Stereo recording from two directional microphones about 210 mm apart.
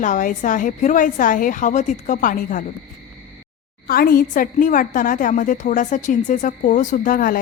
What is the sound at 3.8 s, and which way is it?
A woman's voice, 45° left (ahead or behind).